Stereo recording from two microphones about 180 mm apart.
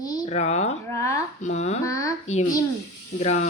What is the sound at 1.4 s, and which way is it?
Speech, 40° left (ahead or behind).